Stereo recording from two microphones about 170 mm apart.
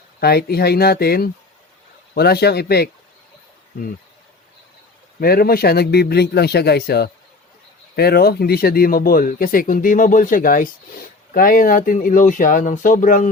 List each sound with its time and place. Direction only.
0.2 s a man's voice: 70° left (ahead or behind)
5.2 s a man's voice: 60° left (ahead or behind)